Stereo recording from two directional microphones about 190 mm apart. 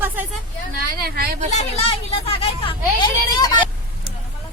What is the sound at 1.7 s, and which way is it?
Speech, 30° left (ahead or behind).